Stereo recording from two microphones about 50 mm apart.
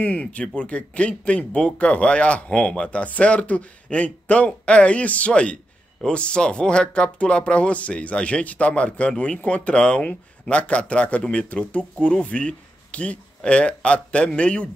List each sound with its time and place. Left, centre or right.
0.0 s a man's voice: left